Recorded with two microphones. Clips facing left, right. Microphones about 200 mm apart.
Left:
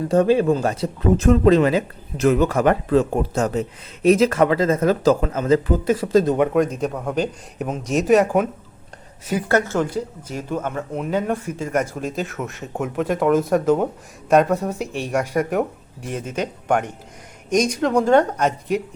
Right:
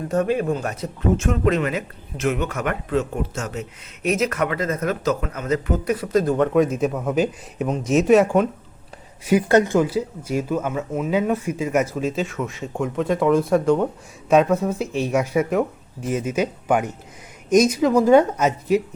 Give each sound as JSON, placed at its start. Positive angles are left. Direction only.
{"t": 0.1, "sound": "speech", "side_deg": 30}
{"t": 6.5, "sound": "speech", "side_deg": -5}
{"t": 9.2, "sound": "speech", "side_deg": -15}